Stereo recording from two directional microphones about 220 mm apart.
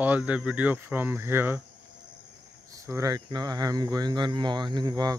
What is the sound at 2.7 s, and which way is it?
Speech, 15° right (ahead or behind).